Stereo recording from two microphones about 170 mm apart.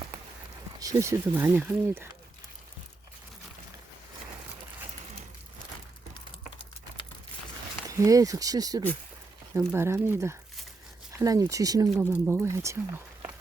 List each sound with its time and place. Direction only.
0.8 s speech: 20° right (ahead or behind)
7.9 s speech: 20° right (ahead or behind)